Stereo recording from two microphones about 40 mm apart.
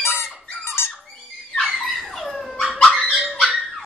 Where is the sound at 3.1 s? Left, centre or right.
Right.